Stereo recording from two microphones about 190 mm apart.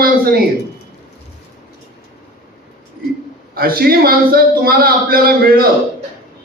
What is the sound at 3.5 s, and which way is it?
A man's voice, 50° right (ahead or behind).